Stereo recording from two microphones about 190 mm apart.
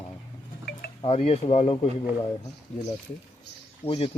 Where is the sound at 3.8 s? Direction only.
30° left (ahead or behind).